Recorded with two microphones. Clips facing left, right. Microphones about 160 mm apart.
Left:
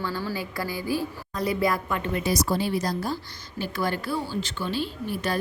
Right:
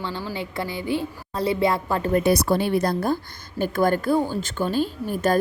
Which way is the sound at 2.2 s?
60° right (ahead or behind).